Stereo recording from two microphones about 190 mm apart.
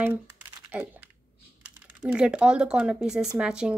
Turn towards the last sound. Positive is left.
turn(degrees=-5)  # may be behind; listen again after turning